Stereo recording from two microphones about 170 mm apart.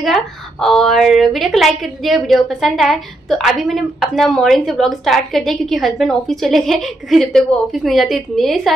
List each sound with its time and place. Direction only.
0.0 s a woman's voice: centre (ahead or behind)